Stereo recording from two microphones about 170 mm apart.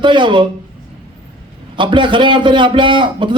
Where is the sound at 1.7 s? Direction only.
30° right (ahead or behind).